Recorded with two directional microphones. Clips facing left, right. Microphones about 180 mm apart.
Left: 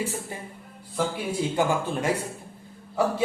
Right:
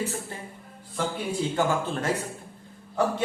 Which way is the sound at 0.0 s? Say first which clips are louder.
Left 1 dB; 10° left (ahead or behind).